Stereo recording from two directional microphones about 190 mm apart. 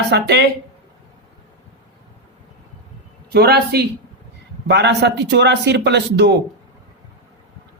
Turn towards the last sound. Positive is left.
turn(degrees=-60)  # may be behind; listen again after turning